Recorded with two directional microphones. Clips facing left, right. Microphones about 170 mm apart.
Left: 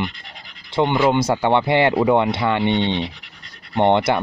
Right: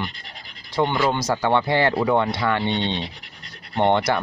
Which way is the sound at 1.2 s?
25° left (ahead or behind).